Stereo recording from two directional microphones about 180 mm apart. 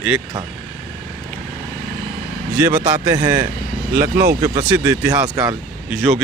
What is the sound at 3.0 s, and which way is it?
A man's voice, 15° right (ahead or behind).